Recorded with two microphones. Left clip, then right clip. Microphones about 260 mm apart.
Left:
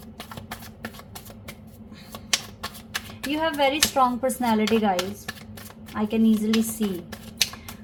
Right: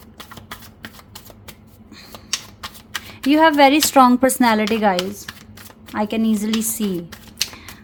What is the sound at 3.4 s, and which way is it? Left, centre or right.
A woman's voice, right.